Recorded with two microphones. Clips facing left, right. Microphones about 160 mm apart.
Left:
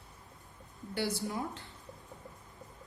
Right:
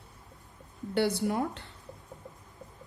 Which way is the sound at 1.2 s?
65° right (ahead or behind).